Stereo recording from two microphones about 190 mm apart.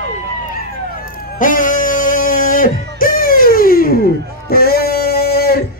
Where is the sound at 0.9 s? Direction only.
50° left (ahead or behind).